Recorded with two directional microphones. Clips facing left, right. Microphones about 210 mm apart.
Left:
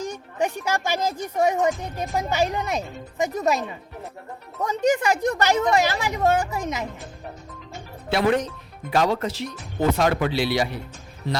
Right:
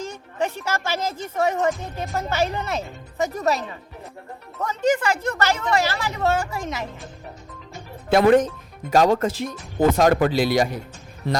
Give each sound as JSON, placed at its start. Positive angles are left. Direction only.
{"t": 0.0, "sound": "speech", "side_deg": 15}
{"t": 4.6, "sound": "speech", "side_deg": 15}
{"t": 8.1, "sound": "speech", "side_deg": -50}
{"t": 11.3, "sound": "speech", "side_deg": -55}